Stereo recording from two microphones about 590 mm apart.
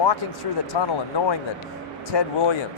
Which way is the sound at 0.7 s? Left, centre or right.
Left.